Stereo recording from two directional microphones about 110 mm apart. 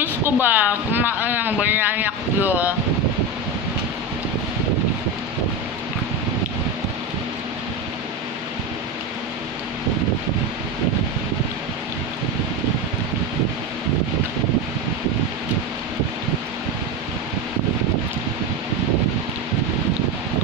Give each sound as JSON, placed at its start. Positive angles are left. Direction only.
{"t": 0.0, "sound": "speech", "side_deg": -15}